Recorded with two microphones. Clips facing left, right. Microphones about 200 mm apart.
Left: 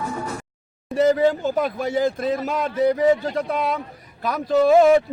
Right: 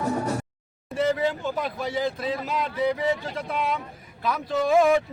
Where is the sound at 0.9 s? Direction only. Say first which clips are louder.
Left 7 dB; 40° left (ahead or behind).